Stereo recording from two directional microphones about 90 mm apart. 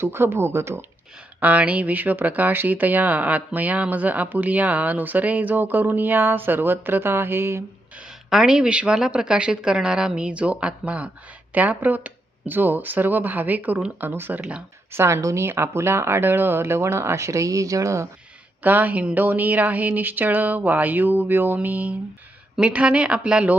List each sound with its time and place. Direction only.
0.0 s speech: 25° right (ahead or behind)
1.4 s speech: 15° right (ahead or behind)
7.9 s a woman's voice: 5° right (ahead or behind); by 18.1 s 35° right (ahead or behind)
18.6 s speech: 20° right (ahead or behind)